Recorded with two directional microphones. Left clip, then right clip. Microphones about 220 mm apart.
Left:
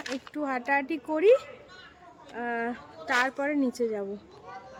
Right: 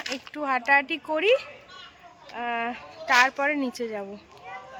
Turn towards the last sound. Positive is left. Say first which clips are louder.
# left 1 dB
turn(degrees=5)  # may be behind; listen again after turning